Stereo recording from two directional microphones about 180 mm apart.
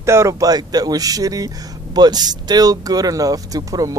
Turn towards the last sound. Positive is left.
turn(degrees=-20)  # may be behind; listen again after turning